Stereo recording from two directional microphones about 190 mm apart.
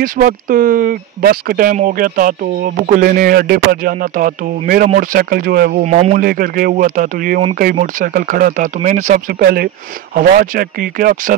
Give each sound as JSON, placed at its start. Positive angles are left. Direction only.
{"t": 0.0, "sound": "speech", "side_deg": -45}
{"t": 6.1, "sound": "speech", "side_deg": -50}